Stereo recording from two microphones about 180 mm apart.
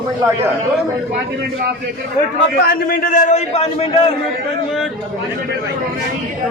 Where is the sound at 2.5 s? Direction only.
55° left (ahead or behind); by 4.1 s 30° left (ahead or behind).